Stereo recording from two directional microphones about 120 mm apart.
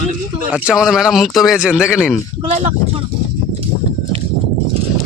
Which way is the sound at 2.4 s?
60° right (ahead or behind).